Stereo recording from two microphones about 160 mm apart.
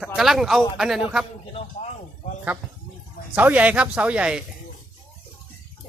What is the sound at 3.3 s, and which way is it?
Speech, 10° right (ahead or behind).